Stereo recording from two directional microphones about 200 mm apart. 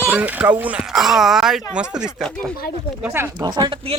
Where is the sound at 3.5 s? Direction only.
25° right (ahead or behind).